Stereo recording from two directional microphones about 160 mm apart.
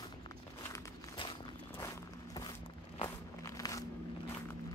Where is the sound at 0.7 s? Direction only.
30° left (ahead or behind).